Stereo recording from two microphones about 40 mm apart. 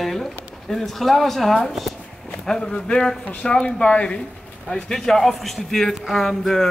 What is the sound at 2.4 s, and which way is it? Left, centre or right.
Speech, centre.